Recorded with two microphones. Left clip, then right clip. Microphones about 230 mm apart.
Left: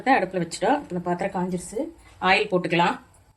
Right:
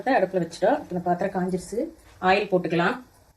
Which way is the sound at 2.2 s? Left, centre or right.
Left.